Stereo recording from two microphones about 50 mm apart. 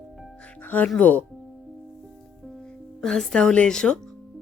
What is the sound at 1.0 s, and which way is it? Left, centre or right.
Speech, left.